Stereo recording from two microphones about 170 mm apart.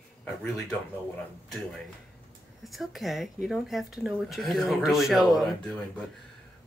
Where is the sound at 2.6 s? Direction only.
Centre (ahead or behind).